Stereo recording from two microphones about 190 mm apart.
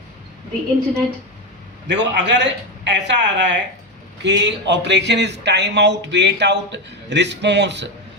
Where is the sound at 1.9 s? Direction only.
65° right (ahead or behind).